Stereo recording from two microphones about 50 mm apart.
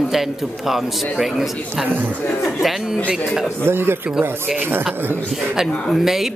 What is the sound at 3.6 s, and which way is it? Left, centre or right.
Speech, right.